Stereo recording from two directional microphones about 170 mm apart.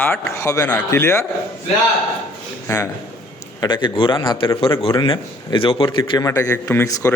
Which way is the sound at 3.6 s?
25° left (ahead or behind).